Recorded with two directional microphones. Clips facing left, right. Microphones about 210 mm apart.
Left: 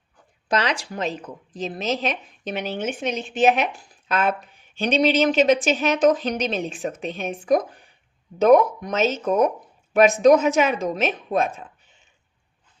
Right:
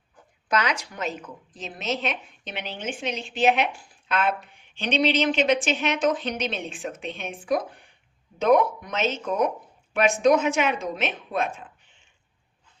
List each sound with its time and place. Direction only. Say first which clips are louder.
0.4 s a woman's voice: left 2 dB; 30° left (ahead or behind)